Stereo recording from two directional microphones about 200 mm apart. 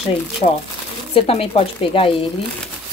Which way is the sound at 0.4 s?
35° left (ahead or behind).